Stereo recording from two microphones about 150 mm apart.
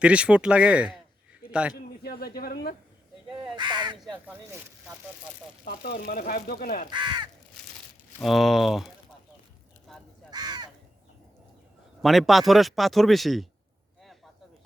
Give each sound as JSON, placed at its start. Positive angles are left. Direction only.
{"t": 0.0, "sound": "a man's voice", "side_deg": -5}
{"t": 2.0, "sound": "speech", "side_deg": 90}
{"t": 3.2, "sound": "speech", "side_deg": -30}
{"t": 4.1, "sound": "speech", "side_deg": -10}
{"t": 5.6, "sound": "speech", "side_deg": 85}
{"t": 6.9, "sound": "speech", "side_deg": -30}
{"t": 8.2, "sound": "speech", "side_deg": 0}
{"t": 9.9, "sound": "crow", "side_deg": 0}
{"t": 10.3, "sound": "crow", "side_deg": -25}
{"t": 12.0, "sound": "speech", "side_deg": 0}